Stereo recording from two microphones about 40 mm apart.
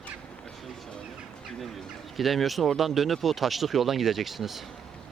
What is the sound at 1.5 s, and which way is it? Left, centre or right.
Chicken, centre.